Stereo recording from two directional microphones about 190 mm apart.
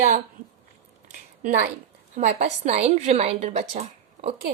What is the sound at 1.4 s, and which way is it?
A woman's voice, 40° right (ahead or behind).